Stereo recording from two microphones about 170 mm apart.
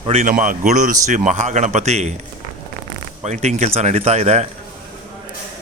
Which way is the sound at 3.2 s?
45° right (ahead or behind).